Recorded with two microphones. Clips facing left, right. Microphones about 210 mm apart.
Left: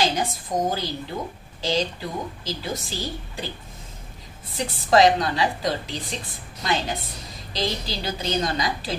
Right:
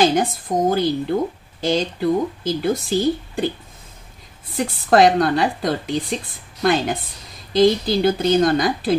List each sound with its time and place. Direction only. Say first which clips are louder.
0.0 s speech: right 7 dB; 55° right (ahead or behind)
4.6 s a woman's voice: right 3 dB; 55° right (ahead or behind)